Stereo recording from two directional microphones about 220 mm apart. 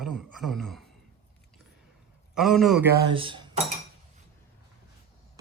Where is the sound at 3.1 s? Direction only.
20° right (ahead or behind).